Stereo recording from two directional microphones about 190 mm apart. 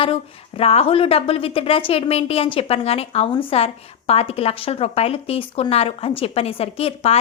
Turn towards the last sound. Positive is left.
turn(degrees=30)  # may be behind; listen again after turning